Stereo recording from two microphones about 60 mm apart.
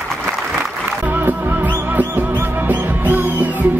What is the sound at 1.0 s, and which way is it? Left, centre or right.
Music, right.